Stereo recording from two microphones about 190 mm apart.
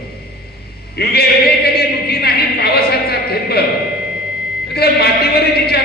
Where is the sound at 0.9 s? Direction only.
55° left (ahead or behind).